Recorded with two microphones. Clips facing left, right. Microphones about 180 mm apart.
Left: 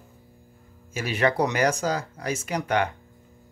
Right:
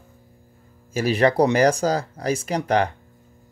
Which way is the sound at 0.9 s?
35° right (ahead or behind).